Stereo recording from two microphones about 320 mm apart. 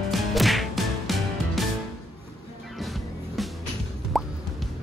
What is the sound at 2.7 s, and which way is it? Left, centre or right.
Music, centre.